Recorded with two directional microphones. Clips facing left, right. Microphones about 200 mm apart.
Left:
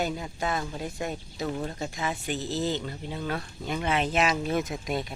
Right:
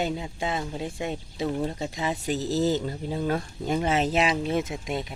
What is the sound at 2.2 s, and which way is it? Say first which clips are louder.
Speech: right 6 dB; 40° right (ahead or behind).